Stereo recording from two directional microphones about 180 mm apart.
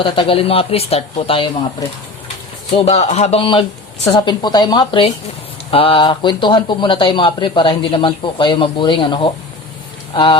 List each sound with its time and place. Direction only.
0.0 s speech: 30° left (ahead or behind)
1.8 s speech: 20° left (ahead or behind)
2.7 s speech: 35° left (ahead or behind)